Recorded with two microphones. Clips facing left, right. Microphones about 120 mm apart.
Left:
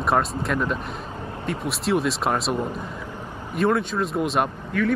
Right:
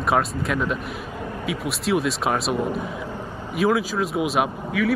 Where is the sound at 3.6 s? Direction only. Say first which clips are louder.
Right 1 dB; 5° right (ahead or behind).